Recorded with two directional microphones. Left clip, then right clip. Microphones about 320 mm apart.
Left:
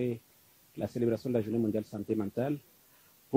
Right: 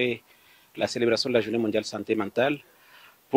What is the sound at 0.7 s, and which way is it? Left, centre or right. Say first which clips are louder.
Speech: right 8 dB; centre.